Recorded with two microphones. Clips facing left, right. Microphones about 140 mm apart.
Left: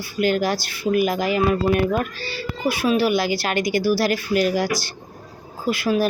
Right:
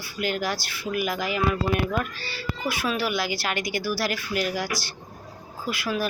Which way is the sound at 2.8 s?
20° left (ahead or behind).